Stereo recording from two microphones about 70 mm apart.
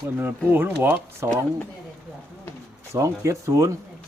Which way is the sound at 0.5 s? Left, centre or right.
Right.